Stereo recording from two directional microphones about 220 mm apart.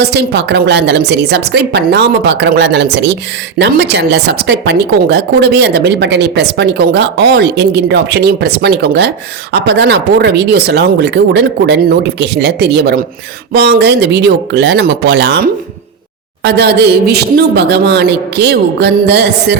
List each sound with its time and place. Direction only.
0.0 s a woman's voice: 50° right (ahead or behind)